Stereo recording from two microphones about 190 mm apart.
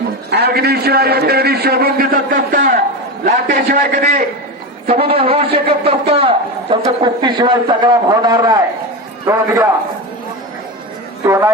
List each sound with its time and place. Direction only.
0.3 s a man's voice: 60° right (ahead or behind)
4.9 s a man's voice: 30° right (ahead or behind); by 9.6 s 15° right (ahead or behind)
11.2 s a man's voice: 15° right (ahead or behind)